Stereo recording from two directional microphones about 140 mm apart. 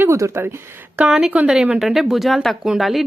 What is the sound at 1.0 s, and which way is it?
Speech, 5° right (ahead or behind).